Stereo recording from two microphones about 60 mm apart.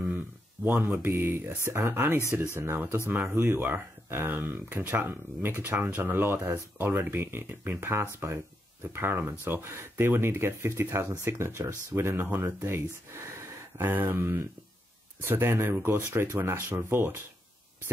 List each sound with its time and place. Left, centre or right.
0.7 s speech: right
13.7 s speech: right
16.0 s speech: right